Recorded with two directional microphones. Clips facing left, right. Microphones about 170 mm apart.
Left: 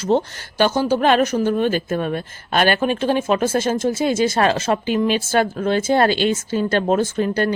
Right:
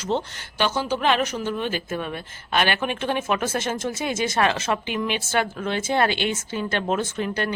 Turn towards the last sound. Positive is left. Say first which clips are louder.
# left 7 dB
turn(degrees=40)  # may be behind; listen again after turning